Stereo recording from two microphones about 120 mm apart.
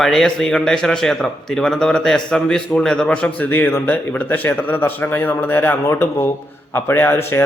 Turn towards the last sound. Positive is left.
turn(degrees=20)  # may be behind; listen again after turning